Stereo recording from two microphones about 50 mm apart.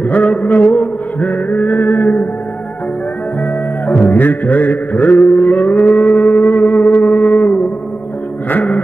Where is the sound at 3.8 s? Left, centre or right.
Left.